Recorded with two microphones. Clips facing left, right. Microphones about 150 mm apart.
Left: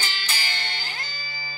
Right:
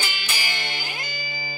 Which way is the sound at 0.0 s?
15° right (ahead or behind).